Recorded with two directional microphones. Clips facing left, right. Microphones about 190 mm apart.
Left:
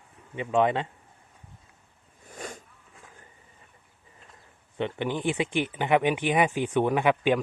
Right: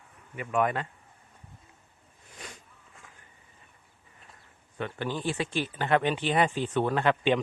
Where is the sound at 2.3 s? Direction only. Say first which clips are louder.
Left 8 dB; 45° left (ahead or behind).